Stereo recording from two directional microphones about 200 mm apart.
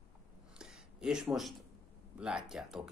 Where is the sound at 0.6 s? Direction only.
5° right (ahead or behind).